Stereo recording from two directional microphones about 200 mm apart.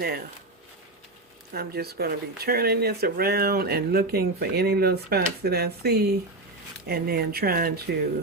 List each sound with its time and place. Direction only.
1.5 s speech: 50° right (ahead or behind)